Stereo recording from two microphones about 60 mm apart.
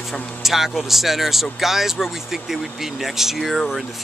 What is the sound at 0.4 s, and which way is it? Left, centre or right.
Speech, centre.